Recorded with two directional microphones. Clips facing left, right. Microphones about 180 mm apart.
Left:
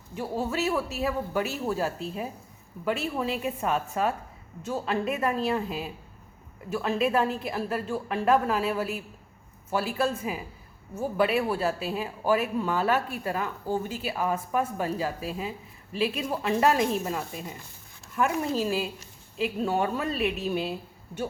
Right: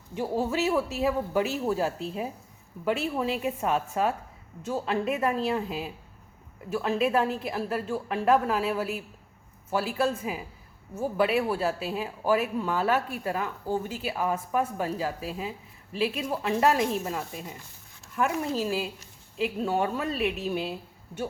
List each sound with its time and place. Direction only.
0.2 s speech: 15° right (ahead or behind)
18.6 s speech: 10° right (ahead or behind)